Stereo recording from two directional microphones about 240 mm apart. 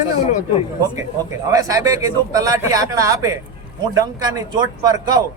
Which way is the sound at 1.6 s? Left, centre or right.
Centre.